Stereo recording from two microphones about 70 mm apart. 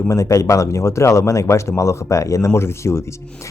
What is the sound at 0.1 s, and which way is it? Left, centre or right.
Speech, left.